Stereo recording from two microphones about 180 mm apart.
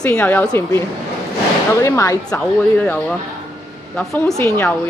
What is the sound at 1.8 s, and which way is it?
Speech, 15° left (ahead or behind).